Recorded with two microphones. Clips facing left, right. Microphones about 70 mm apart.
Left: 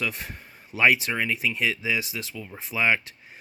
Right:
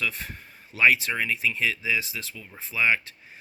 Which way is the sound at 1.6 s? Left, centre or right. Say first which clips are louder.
Left 1 dB; centre.